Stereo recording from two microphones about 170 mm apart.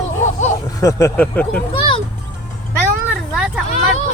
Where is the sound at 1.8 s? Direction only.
35° left (ahead or behind).